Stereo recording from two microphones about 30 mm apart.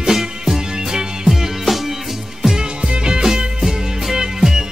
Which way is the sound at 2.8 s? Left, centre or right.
Right.